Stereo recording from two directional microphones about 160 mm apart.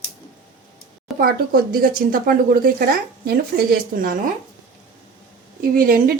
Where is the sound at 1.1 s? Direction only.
Centre (ahead or behind).